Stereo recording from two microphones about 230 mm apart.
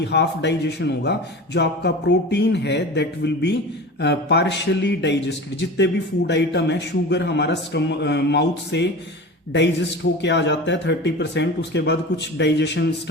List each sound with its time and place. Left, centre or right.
0.0 s a man's voice: left